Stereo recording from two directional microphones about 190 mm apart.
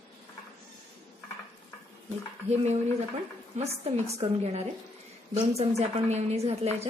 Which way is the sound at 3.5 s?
40° right (ahead or behind).